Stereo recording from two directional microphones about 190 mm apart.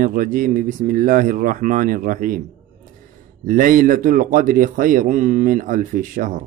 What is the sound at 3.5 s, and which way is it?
A man's voice, 45° right (ahead or behind).